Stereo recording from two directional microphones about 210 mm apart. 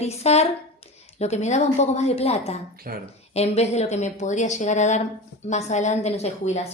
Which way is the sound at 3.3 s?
30° left (ahead or behind).